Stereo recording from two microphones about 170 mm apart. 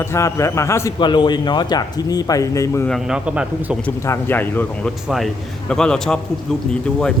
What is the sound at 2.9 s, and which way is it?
Speech, 5° right (ahead or behind).